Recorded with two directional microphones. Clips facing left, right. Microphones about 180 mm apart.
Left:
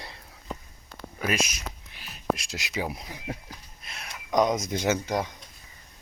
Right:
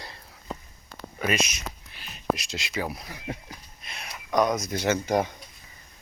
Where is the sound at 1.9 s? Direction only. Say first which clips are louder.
Right 1 dB; 5° left (ahead or behind).